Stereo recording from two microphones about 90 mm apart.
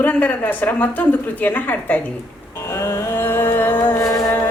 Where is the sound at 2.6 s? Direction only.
35° left (ahead or behind).